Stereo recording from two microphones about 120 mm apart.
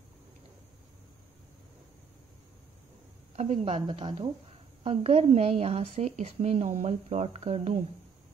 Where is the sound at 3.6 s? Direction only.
50° right (ahead or behind); by 7.8 s 65° right (ahead or behind).